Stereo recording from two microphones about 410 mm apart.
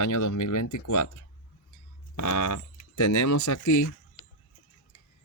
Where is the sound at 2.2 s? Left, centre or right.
Left.